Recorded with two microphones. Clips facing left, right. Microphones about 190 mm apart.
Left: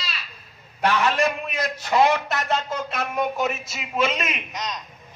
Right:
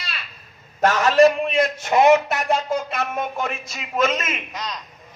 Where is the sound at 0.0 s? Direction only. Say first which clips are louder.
Even; 55° right (ahead or behind).